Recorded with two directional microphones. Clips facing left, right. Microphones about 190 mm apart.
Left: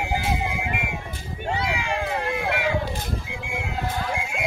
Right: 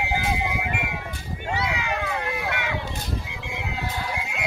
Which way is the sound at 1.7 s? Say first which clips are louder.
Left 1 dB; 30° left (ahead or behind).